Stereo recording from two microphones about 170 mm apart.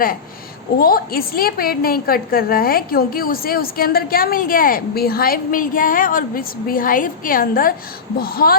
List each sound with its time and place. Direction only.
0.8 s a woman's voice: 60° left (ahead or behind)